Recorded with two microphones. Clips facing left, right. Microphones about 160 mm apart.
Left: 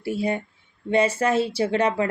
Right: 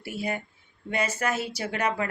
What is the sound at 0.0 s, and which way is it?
A woman's voice, 30° left (ahead or behind).